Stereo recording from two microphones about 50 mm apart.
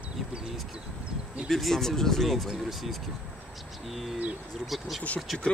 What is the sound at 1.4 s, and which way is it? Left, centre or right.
A man's voice, centre.